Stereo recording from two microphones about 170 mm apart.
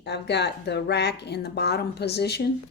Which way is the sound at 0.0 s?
80° left.